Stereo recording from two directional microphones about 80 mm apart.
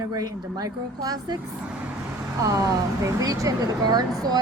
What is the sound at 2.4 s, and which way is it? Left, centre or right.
A woman's voice, right.